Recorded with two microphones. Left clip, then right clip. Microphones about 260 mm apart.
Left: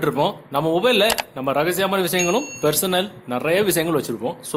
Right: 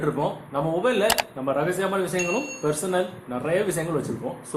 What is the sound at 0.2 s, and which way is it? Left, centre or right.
Speech, left.